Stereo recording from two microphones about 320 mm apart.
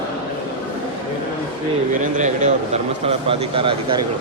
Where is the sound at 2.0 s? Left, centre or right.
Right.